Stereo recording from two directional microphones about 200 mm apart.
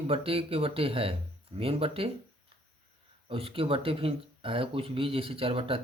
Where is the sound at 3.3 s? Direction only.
30° right (ahead or behind).